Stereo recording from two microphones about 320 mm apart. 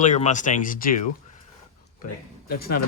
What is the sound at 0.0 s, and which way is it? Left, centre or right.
Speech, left.